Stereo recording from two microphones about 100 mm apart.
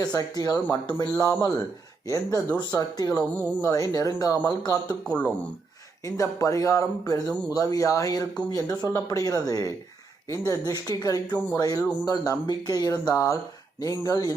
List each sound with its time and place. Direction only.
0.1 s speech: 40° left (ahead or behind)
3.3 s speech: 15° left (ahead or behind)
3.7 s speech: 35° left (ahead or behind)
5.0 s speech: 10° left (ahead or behind)
6.1 s speech: 35° left (ahead or behind)